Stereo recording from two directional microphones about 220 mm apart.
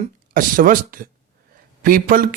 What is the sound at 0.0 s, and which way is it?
A man's voice, 40° right (ahead or behind).